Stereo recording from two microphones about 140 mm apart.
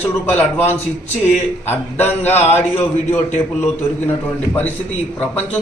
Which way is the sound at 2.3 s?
50° left (ahead or behind).